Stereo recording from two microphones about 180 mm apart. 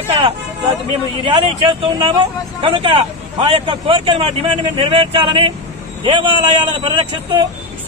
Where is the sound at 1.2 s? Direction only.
30° right (ahead or behind).